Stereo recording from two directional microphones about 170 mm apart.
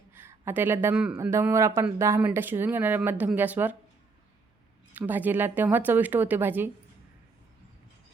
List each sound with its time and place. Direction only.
0.1 s speech: 15° right (ahead or behind)
4.9 s speech: 10° right (ahead or behind)